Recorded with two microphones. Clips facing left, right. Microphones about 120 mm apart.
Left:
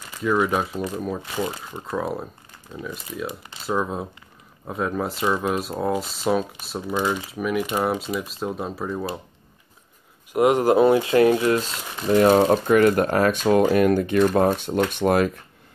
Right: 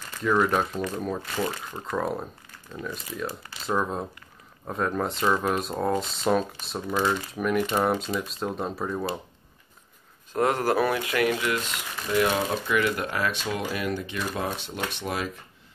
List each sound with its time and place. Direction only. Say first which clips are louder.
0.1 s speech: left 2 dB; 5° left (ahead or behind)
10.3 s speech: left 6 dB; 15° left (ahead or behind); by 15.3 s 55° left (ahead or behind)